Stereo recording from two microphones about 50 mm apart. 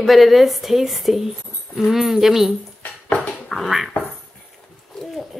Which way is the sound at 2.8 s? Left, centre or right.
Left.